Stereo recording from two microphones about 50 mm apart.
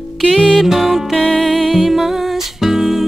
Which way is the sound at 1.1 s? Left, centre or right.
Left.